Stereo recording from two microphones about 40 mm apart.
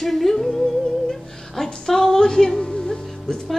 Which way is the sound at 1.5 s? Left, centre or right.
Centre.